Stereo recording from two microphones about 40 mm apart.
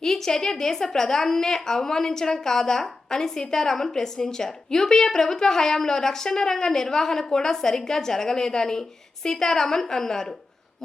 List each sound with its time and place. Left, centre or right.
0.0 s a woman's voice: centre